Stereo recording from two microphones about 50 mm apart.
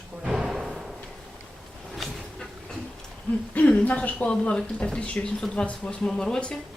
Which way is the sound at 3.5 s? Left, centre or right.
Left.